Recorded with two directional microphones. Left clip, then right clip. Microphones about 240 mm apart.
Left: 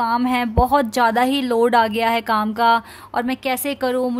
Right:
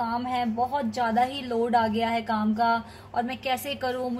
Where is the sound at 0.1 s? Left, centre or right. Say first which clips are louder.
Left 8 dB; left.